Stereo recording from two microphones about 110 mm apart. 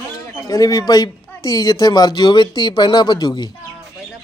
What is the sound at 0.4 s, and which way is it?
Speech, 35° left (ahead or behind).